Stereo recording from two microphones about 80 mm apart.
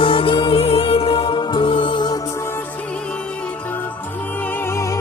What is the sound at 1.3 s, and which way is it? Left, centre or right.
Music, left.